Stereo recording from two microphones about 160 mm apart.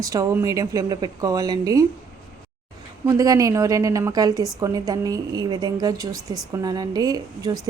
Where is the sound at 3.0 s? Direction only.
20° right (ahead or behind).